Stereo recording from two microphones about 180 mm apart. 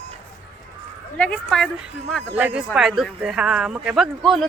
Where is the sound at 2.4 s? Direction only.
10° right (ahead or behind).